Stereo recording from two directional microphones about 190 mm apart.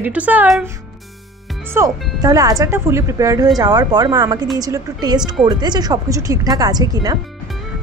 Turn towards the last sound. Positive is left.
turn(degrees=-20)  # may be behind; listen again after turning